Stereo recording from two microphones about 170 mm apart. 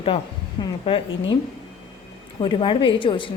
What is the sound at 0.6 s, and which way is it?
Speech, 35° left (ahead or behind).